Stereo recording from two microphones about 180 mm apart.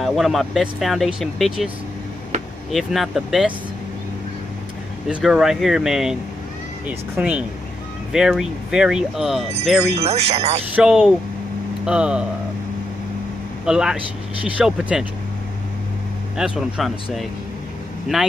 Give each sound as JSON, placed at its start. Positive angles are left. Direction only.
{"t": 0.0, "sound": "speech", "side_deg": 0}
{"t": 2.7, "sound": "speech", "side_deg": 0}
{"t": 5.0, "sound": "speech", "side_deg": -5}
{"t": 9.9, "sound": "speech", "side_deg": -35}
{"t": 10.8, "sound": "speech", "side_deg": -5}
{"t": 13.7, "sound": "speech", "side_deg": -5}
{"t": 16.3, "sound": "speech", "side_deg": -5}